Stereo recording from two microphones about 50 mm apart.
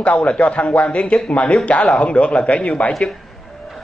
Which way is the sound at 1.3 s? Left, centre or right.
Left.